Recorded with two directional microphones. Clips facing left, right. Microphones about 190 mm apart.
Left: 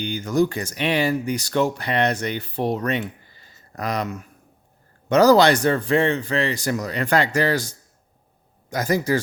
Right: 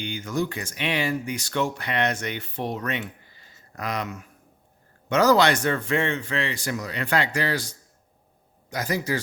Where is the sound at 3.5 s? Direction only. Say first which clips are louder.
Left 4 dB; 40° left (ahead or behind).